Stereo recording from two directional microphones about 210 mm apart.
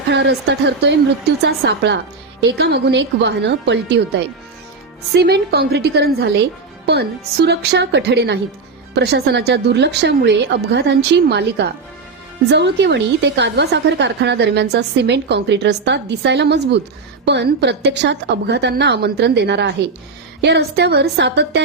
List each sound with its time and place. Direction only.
0.1 s speech: 55° right (ahead or behind)
1.5 s a woman's voice: 55° right (ahead or behind)